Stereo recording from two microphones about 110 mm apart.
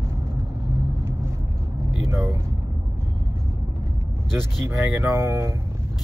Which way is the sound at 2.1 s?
25° right (ahead or behind).